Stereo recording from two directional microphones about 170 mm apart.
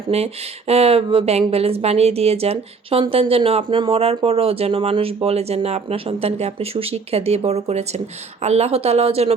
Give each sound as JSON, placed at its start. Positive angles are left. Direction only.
{"t": 0.1, "sound": "a woman's voice", "side_deg": -35}